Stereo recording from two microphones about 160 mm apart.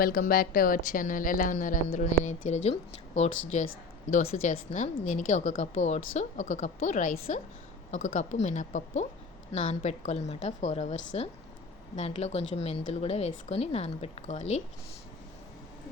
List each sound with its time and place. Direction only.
0.0 s a woman's voice: 65° left (ahead or behind); by 14.6 s 45° left (ahead or behind)